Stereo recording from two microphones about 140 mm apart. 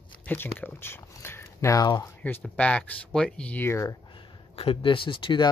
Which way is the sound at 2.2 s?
10° left (ahead or behind).